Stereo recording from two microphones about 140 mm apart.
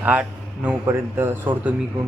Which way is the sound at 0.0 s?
10° right (ahead or behind).